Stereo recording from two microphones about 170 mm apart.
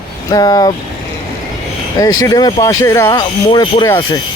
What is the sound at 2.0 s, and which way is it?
A man's voice, 20° left (ahead or behind).